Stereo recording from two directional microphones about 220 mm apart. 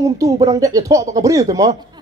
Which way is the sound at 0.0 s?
15° right (ahead or behind).